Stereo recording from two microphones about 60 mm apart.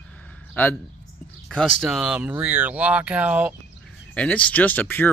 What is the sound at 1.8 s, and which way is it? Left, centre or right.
Speech, centre.